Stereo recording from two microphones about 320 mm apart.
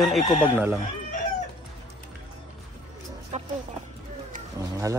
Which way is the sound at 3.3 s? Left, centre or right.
Right.